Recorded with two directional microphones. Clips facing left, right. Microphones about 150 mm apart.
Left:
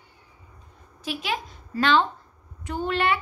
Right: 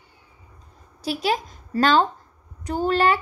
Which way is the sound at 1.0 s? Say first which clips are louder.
Right 6 dB; 35° right (ahead or behind).